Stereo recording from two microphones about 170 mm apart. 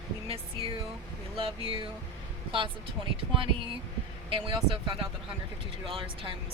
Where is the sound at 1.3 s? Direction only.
30° right (ahead or behind).